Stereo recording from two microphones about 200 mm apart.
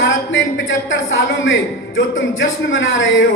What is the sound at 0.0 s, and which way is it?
Speech, 70° left (ahead or behind).